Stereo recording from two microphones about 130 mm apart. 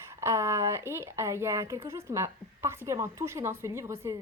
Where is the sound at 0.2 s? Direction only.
20° right (ahead or behind).